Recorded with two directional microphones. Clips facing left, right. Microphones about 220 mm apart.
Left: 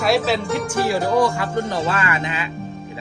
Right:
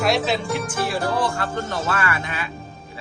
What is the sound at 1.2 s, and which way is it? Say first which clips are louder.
Speech: left 5 dB; 15° left (ahead or behind).